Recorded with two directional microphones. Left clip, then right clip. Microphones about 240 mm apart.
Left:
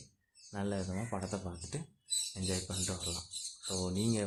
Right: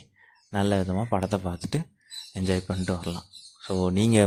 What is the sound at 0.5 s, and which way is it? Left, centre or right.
Speech, right.